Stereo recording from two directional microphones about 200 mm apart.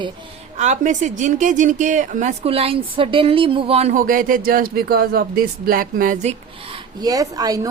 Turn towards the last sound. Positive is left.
turn(degrees=-15)  # may be behind; listen again after turning